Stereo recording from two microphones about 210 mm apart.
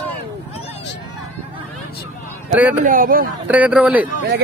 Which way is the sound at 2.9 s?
40° right (ahead or behind).